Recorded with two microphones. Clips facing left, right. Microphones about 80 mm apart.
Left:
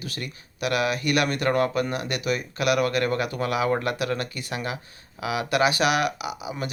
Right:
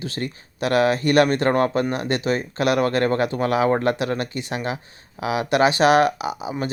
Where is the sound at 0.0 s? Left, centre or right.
Right.